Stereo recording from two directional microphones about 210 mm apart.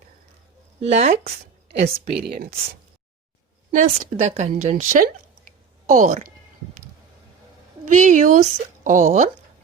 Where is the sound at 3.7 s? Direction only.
35° right (ahead or behind).